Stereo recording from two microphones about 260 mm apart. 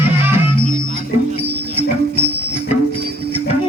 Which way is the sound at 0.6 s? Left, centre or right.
Right.